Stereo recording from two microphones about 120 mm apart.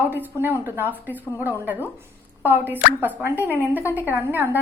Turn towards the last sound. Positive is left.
turn(degrees=-15)  # may be behind; listen again after turning